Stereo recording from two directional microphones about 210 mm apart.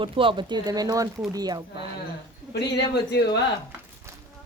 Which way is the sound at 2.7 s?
50° left (ahead or behind).